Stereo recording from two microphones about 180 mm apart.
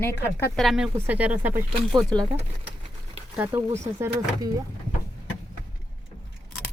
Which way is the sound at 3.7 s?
35° right (ahead or behind).